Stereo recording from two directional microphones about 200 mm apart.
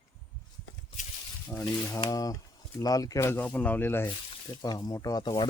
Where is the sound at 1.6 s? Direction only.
15° left (ahead or behind).